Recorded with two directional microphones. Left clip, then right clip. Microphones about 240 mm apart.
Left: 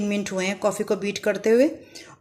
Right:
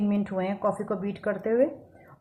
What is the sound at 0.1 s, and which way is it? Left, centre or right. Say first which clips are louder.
A woman's voice: left 3 dB; left.